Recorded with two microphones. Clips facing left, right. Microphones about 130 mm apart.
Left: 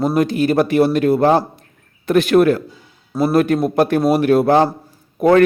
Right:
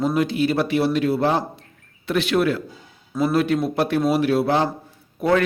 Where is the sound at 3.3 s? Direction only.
50° left (ahead or behind).